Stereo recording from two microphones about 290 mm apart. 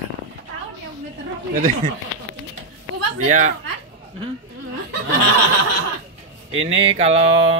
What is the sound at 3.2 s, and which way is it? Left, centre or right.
Speech, right.